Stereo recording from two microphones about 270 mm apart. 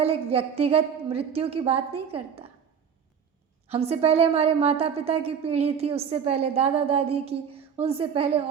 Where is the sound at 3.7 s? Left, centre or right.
Right.